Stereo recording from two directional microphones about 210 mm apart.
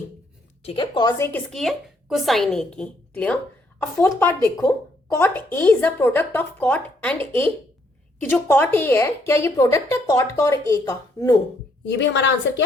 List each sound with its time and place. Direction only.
0.6 s a woman's voice: 25° left (ahead or behind)
1.3 s a woman's voice: centre (ahead or behind)
11.9 s a woman's voice: 55° left (ahead or behind)